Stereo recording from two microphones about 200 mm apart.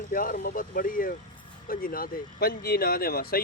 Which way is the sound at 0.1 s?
45° left (ahead or behind).